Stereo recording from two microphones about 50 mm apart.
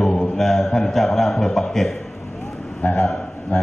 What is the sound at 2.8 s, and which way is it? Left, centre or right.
Speech, left.